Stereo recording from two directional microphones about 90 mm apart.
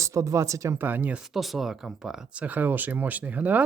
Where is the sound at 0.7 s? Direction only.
20° right (ahead or behind).